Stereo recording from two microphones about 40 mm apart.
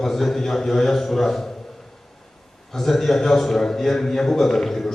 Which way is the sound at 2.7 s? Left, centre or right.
Centre.